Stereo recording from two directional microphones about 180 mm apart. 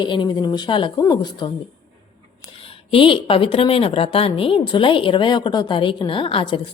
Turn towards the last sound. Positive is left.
turn(degrees=30)  # may be behind; listen again after turning